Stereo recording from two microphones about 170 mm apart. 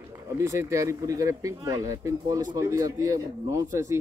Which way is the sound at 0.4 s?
15° right (ahead or behind).